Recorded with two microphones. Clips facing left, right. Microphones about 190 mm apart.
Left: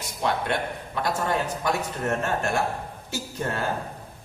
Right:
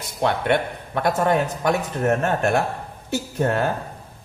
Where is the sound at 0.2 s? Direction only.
60° right (ahead or behind).